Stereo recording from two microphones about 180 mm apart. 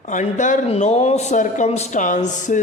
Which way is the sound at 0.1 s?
45° left (ahead or behind).